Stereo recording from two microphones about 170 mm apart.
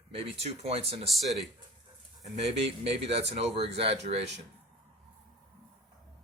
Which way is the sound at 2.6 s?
35° right (ahead or behind).